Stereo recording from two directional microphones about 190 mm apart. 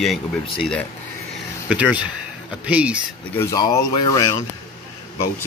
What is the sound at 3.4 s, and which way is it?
Speech, 15° left (ahead or behind).